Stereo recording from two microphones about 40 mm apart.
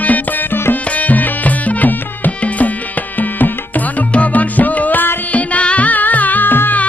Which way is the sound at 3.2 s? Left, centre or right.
Left.